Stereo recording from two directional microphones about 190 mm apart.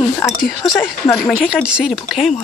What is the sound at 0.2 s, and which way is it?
Speech, centre (ahead or behind).